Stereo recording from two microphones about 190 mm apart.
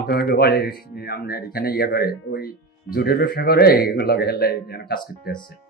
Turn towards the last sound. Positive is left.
turn(degrees=55)  # may be behind; listen again after turning